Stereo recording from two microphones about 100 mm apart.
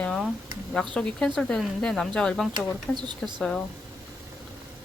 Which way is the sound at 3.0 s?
45° right (ahead or behind).